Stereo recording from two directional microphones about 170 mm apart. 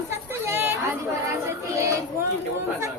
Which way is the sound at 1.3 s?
15° right (ahead or behind).